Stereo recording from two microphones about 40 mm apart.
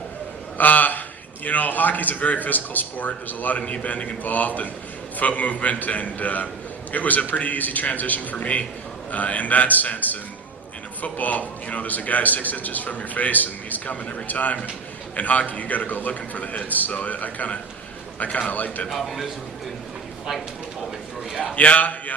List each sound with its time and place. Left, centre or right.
0.6 s a sound: left
1.5 s a man's voice: left
18.9 s a man's voice: centre
21.5 s a man's voice: left